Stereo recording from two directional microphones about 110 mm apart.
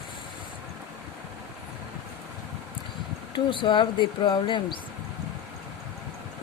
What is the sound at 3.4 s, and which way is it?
Speech, 50° left (ahead or behind).